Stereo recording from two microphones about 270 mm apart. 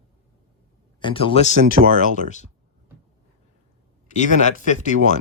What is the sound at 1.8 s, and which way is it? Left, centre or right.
Speech, right.